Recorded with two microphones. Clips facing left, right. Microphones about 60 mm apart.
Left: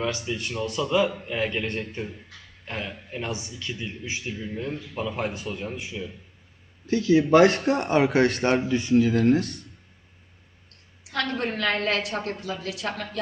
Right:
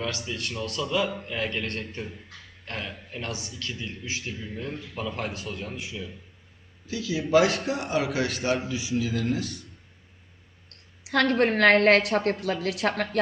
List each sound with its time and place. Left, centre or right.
0.0 s a man's voice: centre
6.8 s speech: left
11.0 s a woman's voice: right